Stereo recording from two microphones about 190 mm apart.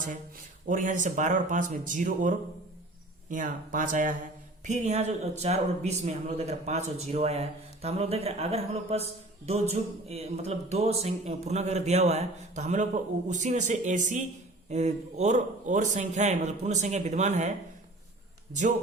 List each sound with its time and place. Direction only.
0.7 s speech: 40° right (ahead or behind)